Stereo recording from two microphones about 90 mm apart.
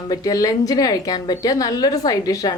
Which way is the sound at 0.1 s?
40° left (ahead or behind).